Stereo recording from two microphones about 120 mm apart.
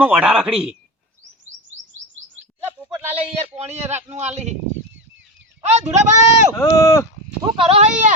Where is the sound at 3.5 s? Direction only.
65° right (ahead or behind).